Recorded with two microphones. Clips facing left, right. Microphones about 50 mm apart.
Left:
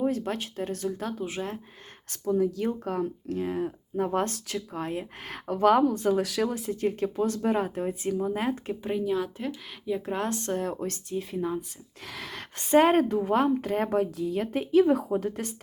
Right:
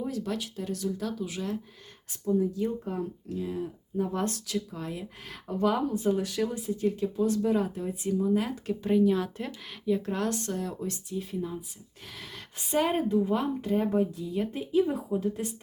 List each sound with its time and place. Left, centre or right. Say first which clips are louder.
0.0 s speech: left 4 dB; left
2.0 s speech: left 2 dB; left
5.5 s speech: left 6 dB; left
6.8 s speech: even; left
8.8 s speech: right 5 dB; centre
10.1 s speech: left 1 dB; left
11.2 s a woman's voice: left 5 dB; left